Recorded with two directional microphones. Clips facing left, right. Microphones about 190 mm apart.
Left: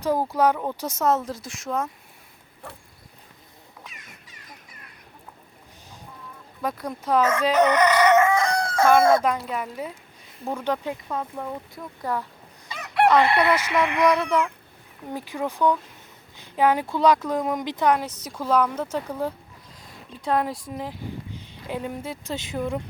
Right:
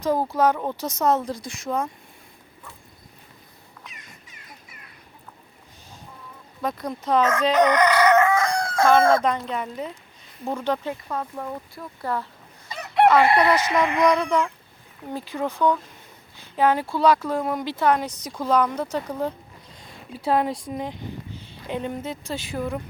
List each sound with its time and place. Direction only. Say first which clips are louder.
0.3 s speech: even; 10° left (ahead or behind)
2.6 s vehicle: left 5 dB; 65° left (ahead or behind)
6.6 s crowing: right 1 dB; 5° left (ahead or behind)
8.5 s speech: even; 10° left (ahead or behind)
13.2 s speech: right 2 dB; 35° right (ahead or behind)
14.2 s speech: right 1 dB; 5° left (ahead or behind)
20.1 s speech: right 2 dB; 5° right (ahead or behind)
22.3 s speech: left 1 dB; 20° left (ahead or behind)